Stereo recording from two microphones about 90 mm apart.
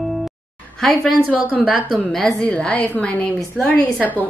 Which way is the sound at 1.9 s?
5° left (ahead or behind).